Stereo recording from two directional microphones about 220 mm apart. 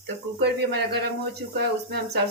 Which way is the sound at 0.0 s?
50° right (ahead or behind).